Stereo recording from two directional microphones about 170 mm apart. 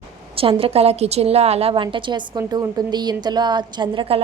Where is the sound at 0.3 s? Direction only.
35° right (ahead or behind).